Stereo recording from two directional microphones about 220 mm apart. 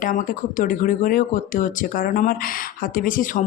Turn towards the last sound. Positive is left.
turn(degrees=40)  # may be behind; listen again after turning